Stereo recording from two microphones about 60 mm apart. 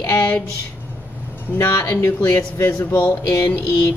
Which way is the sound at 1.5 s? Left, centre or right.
Left.